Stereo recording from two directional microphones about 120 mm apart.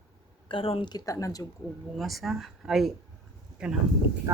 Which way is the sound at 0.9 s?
30° left (ahead or behind).